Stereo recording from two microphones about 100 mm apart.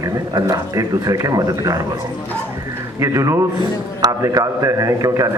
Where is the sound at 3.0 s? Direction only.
30° right (ahead or behind).